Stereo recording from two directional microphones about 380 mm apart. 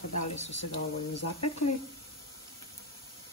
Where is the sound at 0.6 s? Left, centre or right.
Left.